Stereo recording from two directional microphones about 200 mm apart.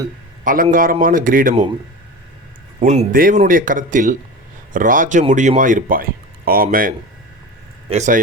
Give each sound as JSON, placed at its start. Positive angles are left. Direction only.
{"t": 0.4, "sound": "a man's voice", "side_deg": -40}
{"t": 2.8, "sound": "speech", "side_deg": -35}